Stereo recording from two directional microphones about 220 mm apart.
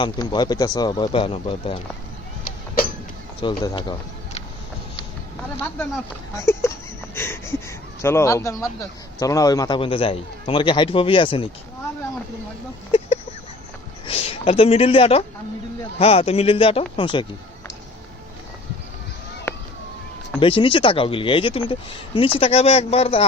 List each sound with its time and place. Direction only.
0.0 s a man's voice: 20° left (ahead or behind)
3.4 s a man's voice: 20° left (ahead or behind)
6.3 s speech: 10° left (ahead or behind)
7.2 s wheeze: 10° left (ahead or behind)
8.0 s a man's voice: 10° left (ahead or behind)
14.1 s a man's voice: 25° left (ahead or behind)
19.5 s police car: 10° left (ahead or behind)
20.4 s a man's voice: 25° left (ahead or behind)